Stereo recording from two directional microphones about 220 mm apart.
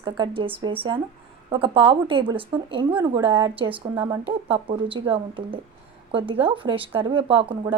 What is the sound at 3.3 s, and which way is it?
Speech, 10° right (ahead or behind).